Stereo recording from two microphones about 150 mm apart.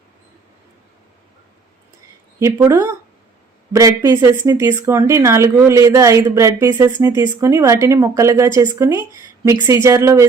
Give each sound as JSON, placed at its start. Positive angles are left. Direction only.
{"t": 2.4, "sound": "speech", "side_deg": -20}